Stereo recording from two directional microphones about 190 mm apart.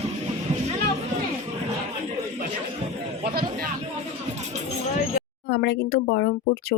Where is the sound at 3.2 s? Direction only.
50° right (ahead or behind).